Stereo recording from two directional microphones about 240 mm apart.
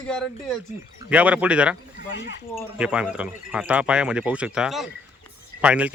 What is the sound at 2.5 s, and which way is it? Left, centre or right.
Speech, centre.